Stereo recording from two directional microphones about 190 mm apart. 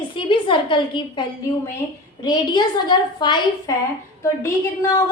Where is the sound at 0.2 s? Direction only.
25° left (ahead or behind).